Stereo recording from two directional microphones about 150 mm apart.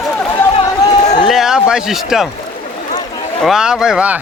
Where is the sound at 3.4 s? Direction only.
5° right (ahead or behind).